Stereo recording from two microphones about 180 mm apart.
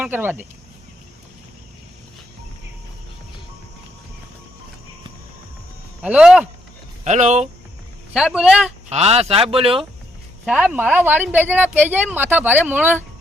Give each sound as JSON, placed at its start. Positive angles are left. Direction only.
{"t": 0.0, "sound": "speech", "side_deg": -10}
{"t": 6.0, "sound": "speech", "side_deg": -5}
{"t": 7.0, "sound": "speech", "side_deg": -40}
{"t": 8.1, "sound": "speech", "side_deg": -5}
{"t": 8.9, "sound": "speech", "side_deg": -35}
{"t": 10.4, "sound": "speech", "side_deg": -5}